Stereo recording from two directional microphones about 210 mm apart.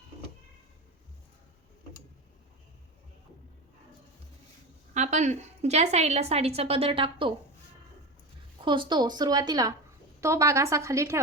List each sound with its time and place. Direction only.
4.9 s a woman's voice: 35° right (ahead or behind)
8.6 s a woman's voice: 25° right (ahead or behind)